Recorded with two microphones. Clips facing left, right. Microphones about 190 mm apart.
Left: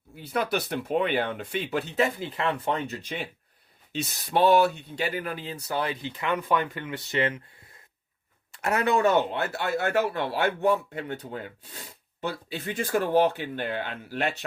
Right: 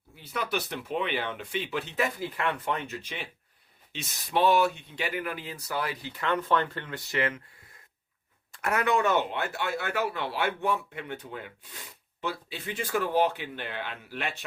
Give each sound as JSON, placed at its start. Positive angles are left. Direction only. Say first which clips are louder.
{"t": 0.3, "sound": "speech", "louder": "left 4 dB", "side_deg": 40}
{"t": 2.0, "sound": "speech", "louder": "left 3 dB", "side_deg": 25}
{"t": 2.9, "sound": "speech", "louder": "left 4 dB", "side_deg": 40}
{"t": 7.1, "sound": "speech", "louder": "left 3 dB", "side_deg": 25}
{"t": 8.6, "sound": "speech", "louder": "left 3 dB", "side_deg": 30}